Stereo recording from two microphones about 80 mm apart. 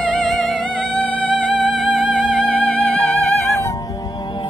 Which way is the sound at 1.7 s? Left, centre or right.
Centre.